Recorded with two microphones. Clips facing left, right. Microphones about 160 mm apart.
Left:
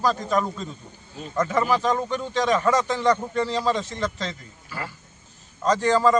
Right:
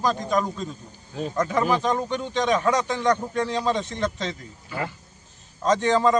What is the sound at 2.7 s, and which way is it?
A man's voice, 15° right (ahead or behind).